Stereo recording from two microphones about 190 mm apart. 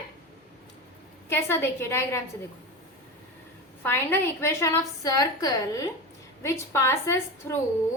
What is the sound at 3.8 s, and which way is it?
A woman's voice, 10° left (ahead or behind).